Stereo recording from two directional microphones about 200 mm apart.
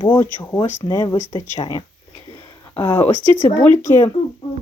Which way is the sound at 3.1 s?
25° right (ahead or behind).